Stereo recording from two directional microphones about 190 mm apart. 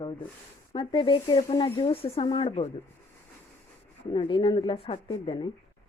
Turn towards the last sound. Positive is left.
turn(degrees=25)  # may be behind; listen again after turning